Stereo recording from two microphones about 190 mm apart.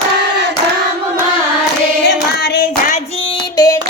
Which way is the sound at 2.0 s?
55° left (ahead or behind).